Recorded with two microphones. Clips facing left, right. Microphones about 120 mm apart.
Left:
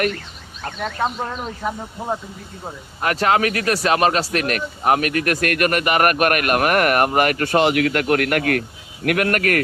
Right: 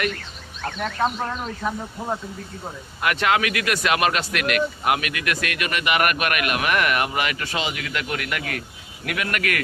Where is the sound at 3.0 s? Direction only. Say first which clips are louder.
Left 3 dB; 35° left (ahead or behind).